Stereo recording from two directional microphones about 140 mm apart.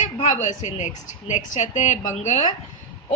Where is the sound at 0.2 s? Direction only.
55° left (ahead or behind).